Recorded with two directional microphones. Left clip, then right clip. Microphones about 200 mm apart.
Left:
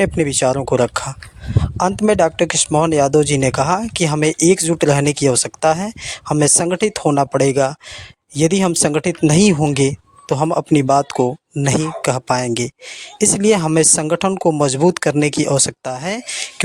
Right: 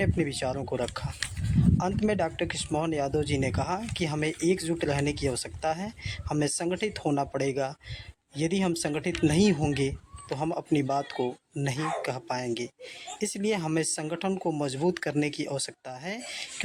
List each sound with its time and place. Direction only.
0.0 s speech: 50° left (ahead or behind)